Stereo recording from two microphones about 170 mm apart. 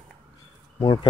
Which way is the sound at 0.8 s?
25° left (ahead or behind).